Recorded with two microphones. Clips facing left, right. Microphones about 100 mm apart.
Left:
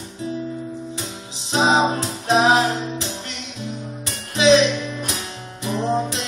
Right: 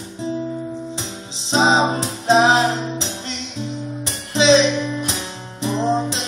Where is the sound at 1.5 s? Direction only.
25° right (ahead or behind).